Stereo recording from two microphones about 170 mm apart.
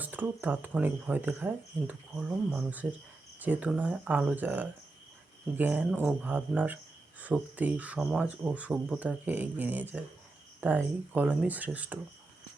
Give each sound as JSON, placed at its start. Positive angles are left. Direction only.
{"t": 0.0, "sound": "speech", "side_deg": -10}